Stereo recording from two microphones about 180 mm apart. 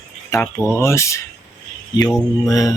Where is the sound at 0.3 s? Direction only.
15° left (ahead or behind).